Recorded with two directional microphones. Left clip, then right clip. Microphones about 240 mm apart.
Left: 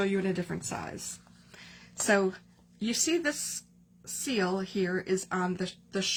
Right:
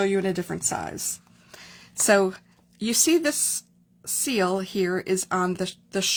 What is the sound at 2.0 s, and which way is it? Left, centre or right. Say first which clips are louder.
Speech: right 6 dB; right.